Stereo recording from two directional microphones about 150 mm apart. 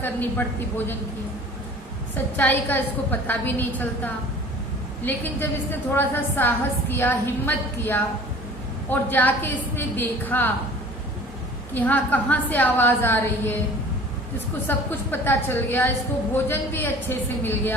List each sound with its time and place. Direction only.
0.0 s a woman's voice: 15° left (ahead or behind)
2.3 s a woman's voice: 10° left (ahead or behind)
11.7 s a woman's voice: 10° left (ahead or behind)
14.7 s a woman's voice: 15° left (ahead or behind)